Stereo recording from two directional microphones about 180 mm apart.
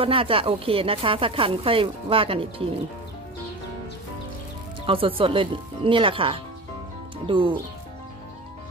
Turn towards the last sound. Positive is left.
turn(degrees=-30)  # may be behind; listen again after turning